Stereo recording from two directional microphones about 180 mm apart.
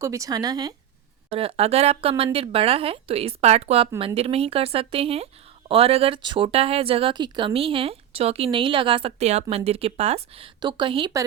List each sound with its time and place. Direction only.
0.0 s speech: 20° right (ahead or behind)
1.3 s speech: 30° right (ahead or behind)